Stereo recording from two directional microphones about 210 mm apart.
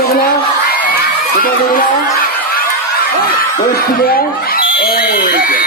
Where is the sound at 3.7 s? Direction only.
45° left (ahead or behind).